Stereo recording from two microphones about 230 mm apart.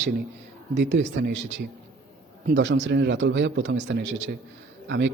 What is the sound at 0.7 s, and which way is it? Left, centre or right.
Speech, right.